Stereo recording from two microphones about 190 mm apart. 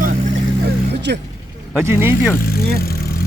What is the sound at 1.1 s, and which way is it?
Speech, 60° right (ahead or behind).